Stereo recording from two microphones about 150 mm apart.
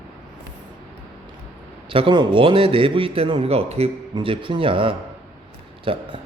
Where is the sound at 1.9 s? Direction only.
35° right (ahead or behind).